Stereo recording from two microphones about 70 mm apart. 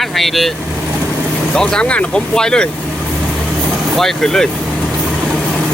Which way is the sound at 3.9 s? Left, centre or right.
Centre.